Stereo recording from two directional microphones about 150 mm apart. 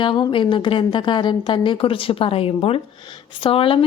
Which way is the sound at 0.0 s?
35° left (ahead or behind).